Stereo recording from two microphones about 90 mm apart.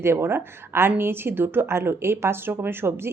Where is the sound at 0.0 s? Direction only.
30° right (ahead or behind).